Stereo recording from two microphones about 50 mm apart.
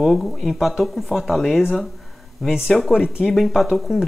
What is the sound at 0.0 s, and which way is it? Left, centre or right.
Speech, centre.